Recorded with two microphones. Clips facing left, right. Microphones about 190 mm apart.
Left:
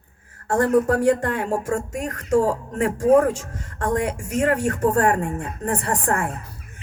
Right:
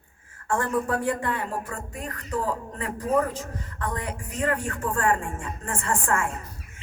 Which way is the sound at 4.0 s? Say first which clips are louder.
Left 10 dB; 85° left.